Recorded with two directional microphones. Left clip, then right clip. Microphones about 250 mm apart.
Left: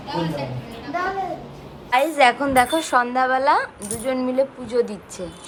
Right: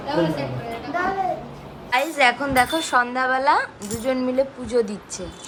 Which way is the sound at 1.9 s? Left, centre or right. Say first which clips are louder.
Left 2 dB; centre.